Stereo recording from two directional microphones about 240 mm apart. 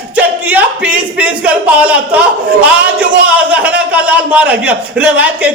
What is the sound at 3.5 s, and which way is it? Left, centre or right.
A man's voice, centre.